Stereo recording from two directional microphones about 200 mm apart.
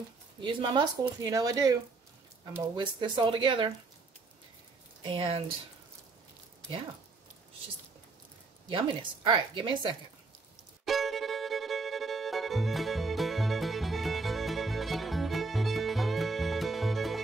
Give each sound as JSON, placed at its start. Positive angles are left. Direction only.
{"t": 0.4, "sound": "speech", "side_deg": -25}
{"t": 5.0, "sound": "speech", "side_deg": -25}
{"t": 8.6, "sound": "speech", "side_deg": -25}
{"t": 10.9, "sound": "music", "side_deg": 0}